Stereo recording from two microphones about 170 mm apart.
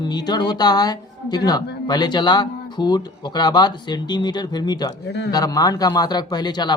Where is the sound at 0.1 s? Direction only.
25° left (ahead or behind).